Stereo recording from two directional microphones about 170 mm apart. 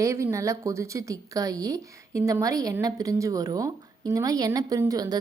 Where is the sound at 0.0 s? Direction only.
15° right (ahead or behind).